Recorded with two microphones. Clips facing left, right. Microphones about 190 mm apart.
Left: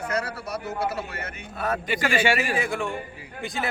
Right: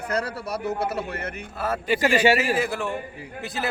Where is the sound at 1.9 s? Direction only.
40° right (ahead or behind).